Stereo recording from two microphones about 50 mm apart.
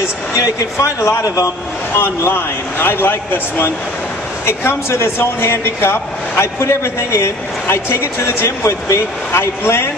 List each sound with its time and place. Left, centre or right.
0.7 s a man's voice: left
2.0 s speech: left
4.5 s speech: left